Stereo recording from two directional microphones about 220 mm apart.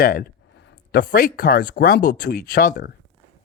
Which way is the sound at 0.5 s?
50° left (ahead or behind).